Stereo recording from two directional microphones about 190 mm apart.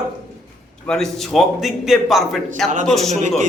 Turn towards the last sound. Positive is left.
turn(degrees=0)  # may be behind; listen again after turning